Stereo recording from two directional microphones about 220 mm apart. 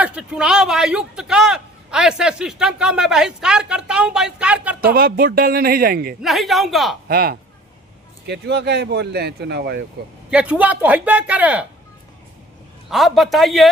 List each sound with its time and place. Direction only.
0.0 s speech: 5° right (ahead or behind)
4.9 s speech: 40° right (ahead or behind)
6.2 s speech: centre (ahead or behind)
7.1 s speech: 45° right (ahead or behind)
10.2 s a man's voice: 5° right (ahead or behind)
12.9 s speech: centre (ahead or behind)